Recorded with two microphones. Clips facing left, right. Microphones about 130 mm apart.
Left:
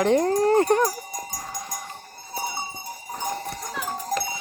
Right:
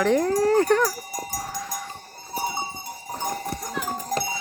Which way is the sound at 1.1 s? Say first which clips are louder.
Right 3 dB; 10° right (ahead or behind).